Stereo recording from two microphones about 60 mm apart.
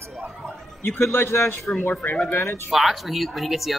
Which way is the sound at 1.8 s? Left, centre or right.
Left.